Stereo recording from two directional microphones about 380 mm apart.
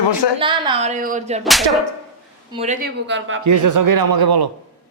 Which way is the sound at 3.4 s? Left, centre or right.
Right.